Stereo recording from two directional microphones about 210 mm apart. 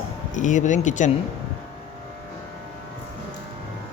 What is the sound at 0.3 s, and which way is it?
Speech, 35° left (ahead or behind).